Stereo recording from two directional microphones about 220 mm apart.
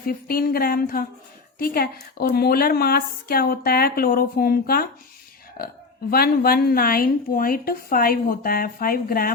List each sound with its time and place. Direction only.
0.1 s a woman's voice: 40° left (ahead or behind)